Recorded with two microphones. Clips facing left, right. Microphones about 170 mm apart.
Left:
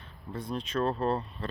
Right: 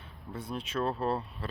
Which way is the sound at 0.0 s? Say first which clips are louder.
Left 2 dB; 5° right (ahead or behind).